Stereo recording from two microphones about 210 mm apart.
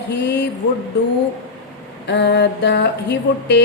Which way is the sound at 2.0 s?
55° left (ahead or behind).